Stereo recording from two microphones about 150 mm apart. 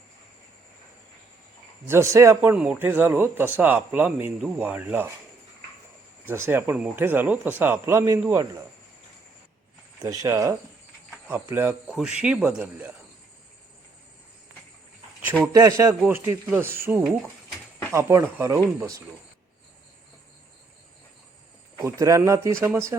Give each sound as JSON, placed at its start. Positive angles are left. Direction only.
{"t": 1.9, "sound": "a man's voice", "side_deg": -20}
{"t": 6.2, "sound": "a man's voice", "side_deg": -15}
{"t": 10.0, "sound": "a man's voice", "side_deg": -20}
{"t": 15.5, "sound": "a man's voice", "side_deg": -20}
{"t": 21.8, "sound": "speech", "side_deg": -20}